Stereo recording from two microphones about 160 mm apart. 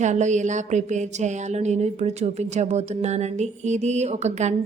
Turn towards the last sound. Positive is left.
turn(degrees=-45)  # may be behind; listen again after turning